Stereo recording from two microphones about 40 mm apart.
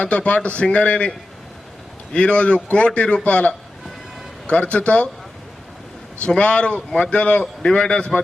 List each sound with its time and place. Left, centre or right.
0.0 s a man's voice: left
2.1 s a man's voice: left
6.2 s speech: left